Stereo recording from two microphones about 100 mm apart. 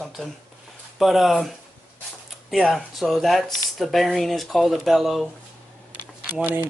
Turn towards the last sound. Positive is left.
turn(degrees=-20)  # may be behind; listen again after turning